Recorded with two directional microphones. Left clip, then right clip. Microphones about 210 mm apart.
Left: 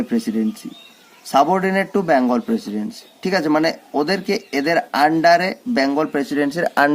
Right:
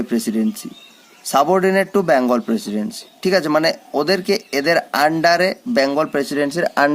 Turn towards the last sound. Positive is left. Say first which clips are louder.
# even
turn(degrees=-5)  # may be behind; listen again after turning